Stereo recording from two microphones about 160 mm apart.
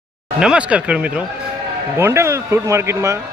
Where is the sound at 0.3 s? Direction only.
5° right (ahead or behind).